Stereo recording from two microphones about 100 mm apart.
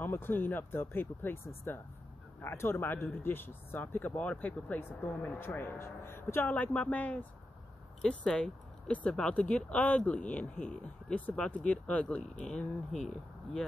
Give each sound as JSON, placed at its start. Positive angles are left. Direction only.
{"t": 0.0, "sound": "speech", "side_deg": 20}